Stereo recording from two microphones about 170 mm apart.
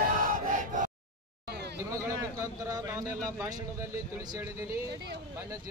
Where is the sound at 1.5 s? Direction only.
75° right (ahead or behind).